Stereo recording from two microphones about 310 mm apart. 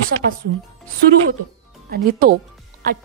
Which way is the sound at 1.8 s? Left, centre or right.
Right.